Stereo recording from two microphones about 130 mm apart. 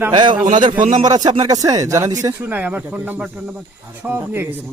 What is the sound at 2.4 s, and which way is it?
Speech, 15° right (ahead or behind).